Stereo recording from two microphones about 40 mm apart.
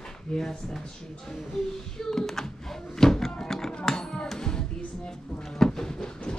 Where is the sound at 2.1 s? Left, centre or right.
Centre.